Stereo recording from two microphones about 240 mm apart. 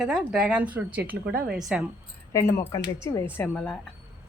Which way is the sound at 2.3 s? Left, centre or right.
Centre.